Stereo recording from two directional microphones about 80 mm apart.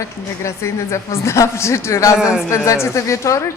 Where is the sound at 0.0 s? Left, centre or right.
Left.